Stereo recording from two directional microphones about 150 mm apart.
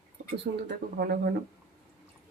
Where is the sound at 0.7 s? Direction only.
90° right.